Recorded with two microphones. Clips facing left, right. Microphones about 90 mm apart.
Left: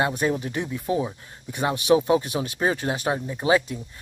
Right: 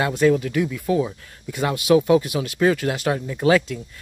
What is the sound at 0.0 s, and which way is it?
Speech, 25° left (ahead or behind).